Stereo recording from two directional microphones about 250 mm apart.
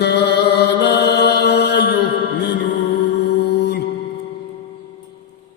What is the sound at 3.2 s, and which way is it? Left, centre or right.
Music, left.